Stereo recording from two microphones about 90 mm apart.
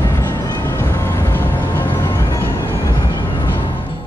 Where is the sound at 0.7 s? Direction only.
25° left (ahead or behind).